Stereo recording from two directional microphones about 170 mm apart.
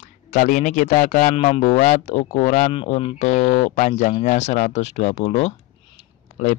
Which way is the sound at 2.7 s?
30° left (ahead or behind).